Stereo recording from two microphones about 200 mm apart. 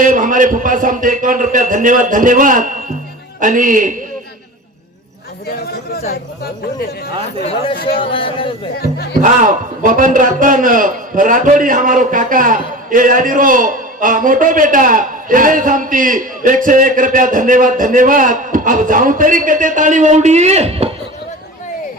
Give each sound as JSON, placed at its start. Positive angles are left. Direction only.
{"t": 0.0, "sound": "a man's voice", "side_deg": -40}
{"t": 7.8, "sound": "speech", "side_deg": 50}
{"t": 8.1, "sound": "speech", "side_deg": 25}
{"t": 9.2, "sound": "a man's voice", "side_deg": -40}